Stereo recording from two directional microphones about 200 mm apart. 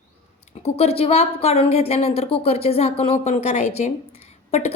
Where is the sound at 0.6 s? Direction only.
30° left (ahead or behind).